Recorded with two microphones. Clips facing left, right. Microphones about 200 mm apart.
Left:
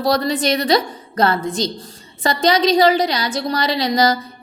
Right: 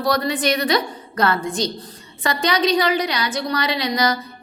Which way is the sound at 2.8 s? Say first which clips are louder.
Left 5 dB; 40° left (ahead or behind).